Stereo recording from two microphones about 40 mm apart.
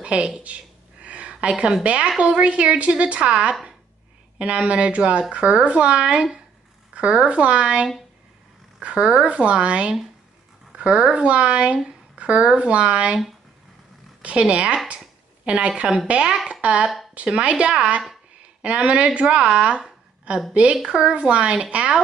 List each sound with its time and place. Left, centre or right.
0.0 s speech: right
1.0 s a sound: right
1.3 s speech: right
9.2 s speech: right
10.7 s a sound: right
11.2 s speech: right
14.2 s a woman's voice: right
20.8 s speech: centre
21.1 s speech: right